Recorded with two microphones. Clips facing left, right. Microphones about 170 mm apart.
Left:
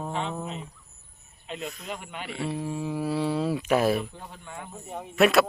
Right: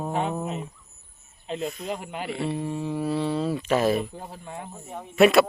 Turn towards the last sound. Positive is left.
turn(degrees=0)  # may be behind; listen again after turning